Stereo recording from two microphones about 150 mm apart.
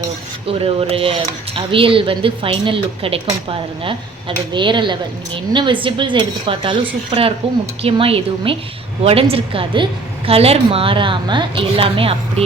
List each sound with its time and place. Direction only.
0.4 s speech: 40° right (ahead or behind)